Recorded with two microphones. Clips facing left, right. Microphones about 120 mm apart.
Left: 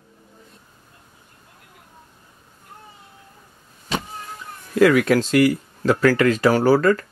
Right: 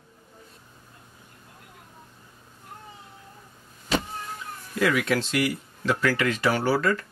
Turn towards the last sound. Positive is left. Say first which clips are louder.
# left 8 dB
turn(degrees=40)  # may be behind; listen again after turning